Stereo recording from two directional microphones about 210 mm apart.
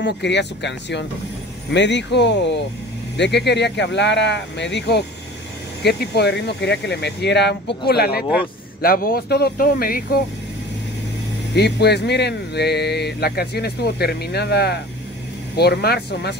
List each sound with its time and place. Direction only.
0.0 s speech: 55° left (ahead or behind)
11.5 s speech: 50° left (ahead or behind)